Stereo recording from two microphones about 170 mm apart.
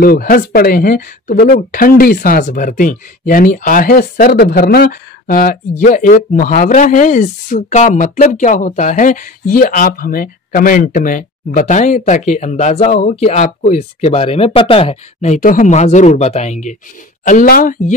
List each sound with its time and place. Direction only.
0.0 s speech: 60° left (ahead or behind)
17.3 s speech: 55° left (ahead or behind)